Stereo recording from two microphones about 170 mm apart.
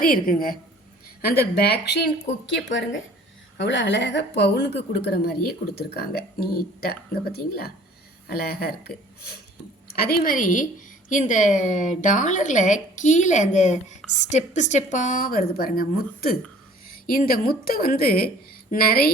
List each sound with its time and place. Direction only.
0.0 s speech: 55° left (ahead or behind)
1.3 s a woman's voice: 70° left (ahead or behind)
2.5 s a woman's voice: 90° left; by 8.7 s 70° left (ahead or behind)
9.9 s a woman's voice: 65° left (ahead or behind)